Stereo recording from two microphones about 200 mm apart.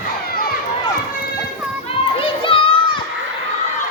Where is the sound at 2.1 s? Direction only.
25° left (ahead or behind).